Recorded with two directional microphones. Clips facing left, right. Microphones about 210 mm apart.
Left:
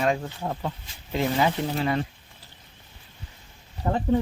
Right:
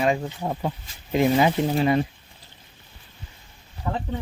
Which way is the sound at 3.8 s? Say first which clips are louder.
Left 3 dB; 35° left (ahead or behind).